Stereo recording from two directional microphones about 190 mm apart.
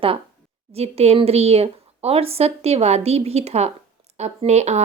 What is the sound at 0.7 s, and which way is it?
Speech, 30° right (ahead or behind).